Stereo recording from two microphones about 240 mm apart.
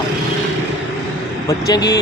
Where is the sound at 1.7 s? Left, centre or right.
Centre.